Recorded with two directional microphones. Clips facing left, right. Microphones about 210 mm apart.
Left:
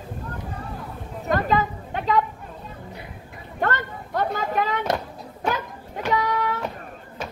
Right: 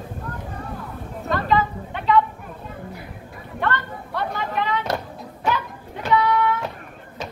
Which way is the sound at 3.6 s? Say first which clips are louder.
Even; 45° left (ahead or behind).